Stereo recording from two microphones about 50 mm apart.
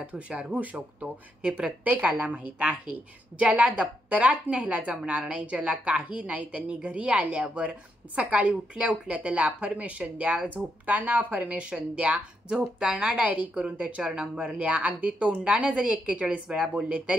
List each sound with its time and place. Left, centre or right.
0.3 s speech: right
10.6 s speech: centre
10.9 s a woman's voice: right